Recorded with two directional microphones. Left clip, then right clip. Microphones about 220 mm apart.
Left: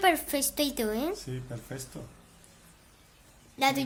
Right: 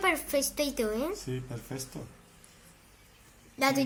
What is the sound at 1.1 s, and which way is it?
Speech, 15° right (ahead or behind).